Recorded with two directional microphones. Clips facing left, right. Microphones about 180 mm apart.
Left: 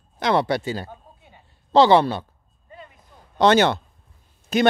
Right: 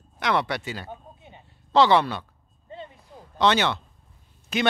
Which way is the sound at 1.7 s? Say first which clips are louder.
Left 4 dB; 30° left (ahead or behind).